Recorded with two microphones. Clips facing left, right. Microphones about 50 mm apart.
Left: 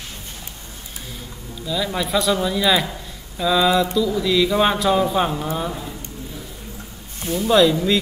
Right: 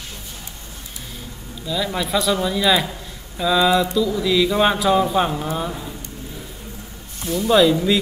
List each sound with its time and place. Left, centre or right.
1.7 s speech: centre
7.3 s speech: centre